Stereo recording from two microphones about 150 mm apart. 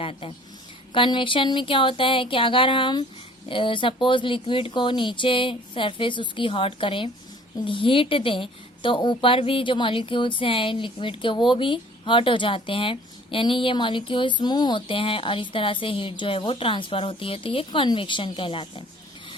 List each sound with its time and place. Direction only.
0.0 s a woman's voice: 40° left (ahead or behind)